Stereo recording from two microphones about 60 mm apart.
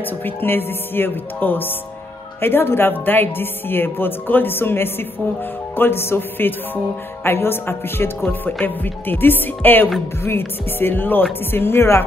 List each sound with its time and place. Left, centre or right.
0.0 s speech: left